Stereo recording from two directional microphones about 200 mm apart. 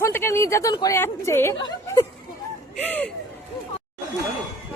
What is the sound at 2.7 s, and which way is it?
Speech, 5° left (ahead or behind).